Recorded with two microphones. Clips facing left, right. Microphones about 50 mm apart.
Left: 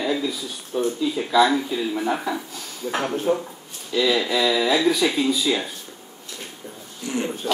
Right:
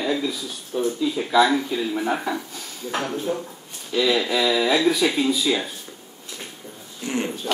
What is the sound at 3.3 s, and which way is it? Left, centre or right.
Speech, left.